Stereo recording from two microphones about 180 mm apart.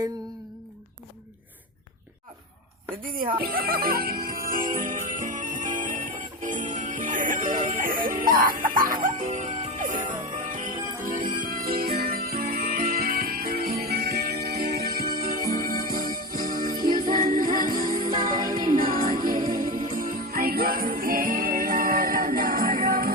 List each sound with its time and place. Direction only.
3.0 s music: 50° right (ahead or behind)